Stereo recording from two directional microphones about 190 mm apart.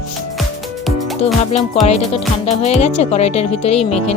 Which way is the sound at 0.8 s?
Centre (ahead or behind).